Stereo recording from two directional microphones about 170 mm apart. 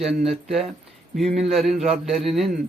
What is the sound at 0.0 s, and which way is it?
Speech, centre (ahead or behind).